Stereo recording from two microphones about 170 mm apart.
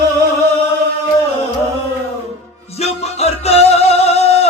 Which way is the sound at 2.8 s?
35° left (ahead or behind).